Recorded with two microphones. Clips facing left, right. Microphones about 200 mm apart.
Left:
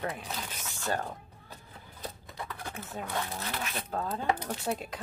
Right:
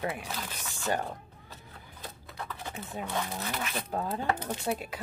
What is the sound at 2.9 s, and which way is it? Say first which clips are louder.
Speech: right 1 dB; 10° right (ahead or behind).